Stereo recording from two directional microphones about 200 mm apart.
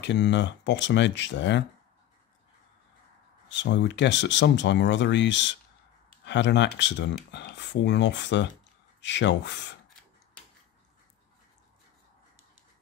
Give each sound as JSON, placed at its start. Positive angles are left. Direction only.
{"t": 0.0, "sound": "speech", "side_deg": 60}
{"t": 3.4, "sound": "speech", "side_deg": 60}